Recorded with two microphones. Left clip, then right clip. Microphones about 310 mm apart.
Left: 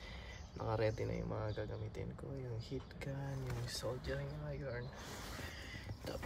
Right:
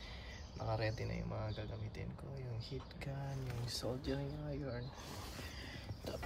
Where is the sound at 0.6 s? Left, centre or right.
Centre.